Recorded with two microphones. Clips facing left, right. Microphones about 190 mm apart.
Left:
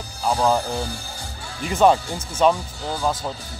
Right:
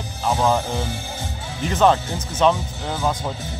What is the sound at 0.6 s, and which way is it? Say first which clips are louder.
Speech: right 1 dB; 20° right (ahead or behind).